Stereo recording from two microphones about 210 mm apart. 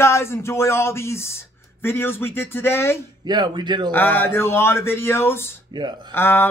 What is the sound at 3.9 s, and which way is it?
Speech, 10° left (ahead or behind).